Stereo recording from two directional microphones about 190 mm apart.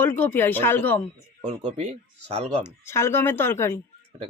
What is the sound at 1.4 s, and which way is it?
Speech, 35° right (ahead or behind).